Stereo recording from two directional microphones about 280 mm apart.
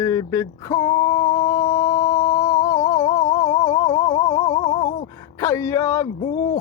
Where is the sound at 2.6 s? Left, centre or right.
Centre.